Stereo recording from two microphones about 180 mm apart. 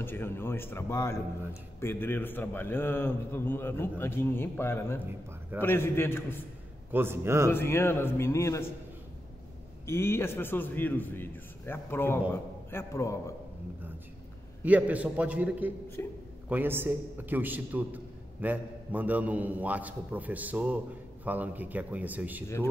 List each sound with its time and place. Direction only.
0.0 s a man's voice: 10° left (ahead or behind)
6.9 s a man's voice: 15° right (ahead or behind)
7.5 s a man's voice: 15° left (ahead or behind)
9.8 s a man's voice: 15° left (ahead or behind)
14.6 s a man's voice: 10° right (ahead or behind)
16.0 s a man's voice: 15° left (ahead or behind)
16.4 s a man's voice: 10° right (ahead or behind)